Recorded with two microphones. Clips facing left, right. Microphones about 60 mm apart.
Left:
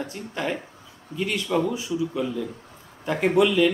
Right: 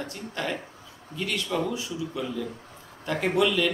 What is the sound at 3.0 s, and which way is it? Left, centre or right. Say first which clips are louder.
Speech: left 4 dB; centre.